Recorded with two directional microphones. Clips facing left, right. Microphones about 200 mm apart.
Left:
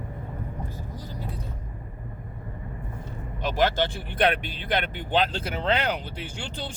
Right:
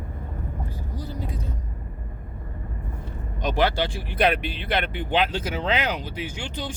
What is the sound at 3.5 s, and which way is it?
Speech, 10° right (ahead or behind).